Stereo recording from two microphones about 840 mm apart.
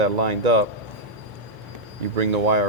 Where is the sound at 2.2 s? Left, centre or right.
Right.